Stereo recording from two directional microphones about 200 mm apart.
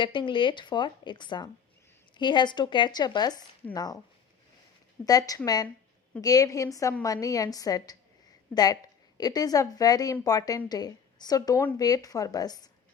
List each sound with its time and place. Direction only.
0.0 s a woman's voice: 25° left (ahead or behind)
5.0 s a woman's voice: 20° left (ahead or behind)